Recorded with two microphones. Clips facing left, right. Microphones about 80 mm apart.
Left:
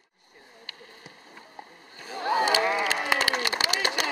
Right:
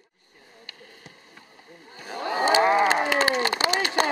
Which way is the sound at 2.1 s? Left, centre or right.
Right.